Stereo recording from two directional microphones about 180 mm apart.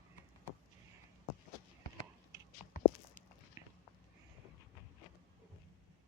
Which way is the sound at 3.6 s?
15° right (ahead or behind).